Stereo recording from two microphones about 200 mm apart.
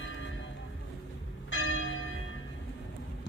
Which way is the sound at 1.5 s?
90° left.